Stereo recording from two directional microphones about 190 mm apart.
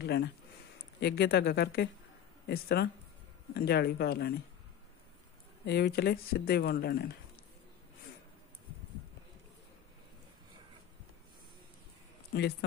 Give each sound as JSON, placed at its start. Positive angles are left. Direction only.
{"t": 0.0, "sound": "speech", "side_deg": 60}
{"t": 5.7, "sound": "speech", "side_deg": 55}
{"t": 12.3, "sound": "speech", "side_deg": 55}